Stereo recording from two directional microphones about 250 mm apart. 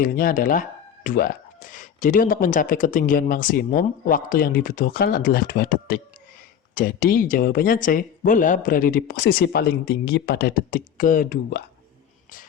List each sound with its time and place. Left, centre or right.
0.0 s speech: left